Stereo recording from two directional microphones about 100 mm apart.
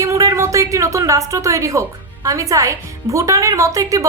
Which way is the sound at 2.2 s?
35° right (ahead or behind).